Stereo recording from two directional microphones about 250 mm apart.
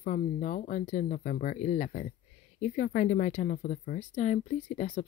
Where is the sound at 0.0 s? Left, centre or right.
Left.